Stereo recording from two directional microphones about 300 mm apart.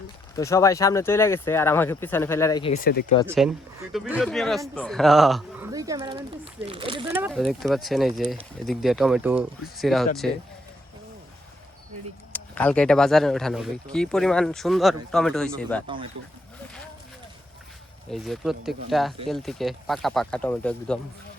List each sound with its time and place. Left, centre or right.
0.3 s speech: centre; by 3.0 s left
3.2 s speech: centre
5.7 s speech: centre
7.2 s speech: centre
12.3 s speech: centre
18.1 s speech: centre